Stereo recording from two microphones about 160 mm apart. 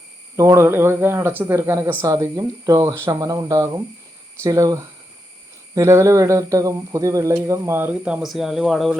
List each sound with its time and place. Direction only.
0.3 s speech: 20° right (ahead or behind); by 9.0 s centre (ahead or behind)